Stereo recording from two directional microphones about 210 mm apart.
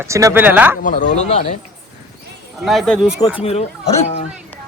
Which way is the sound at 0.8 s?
35° left (ahead or behind).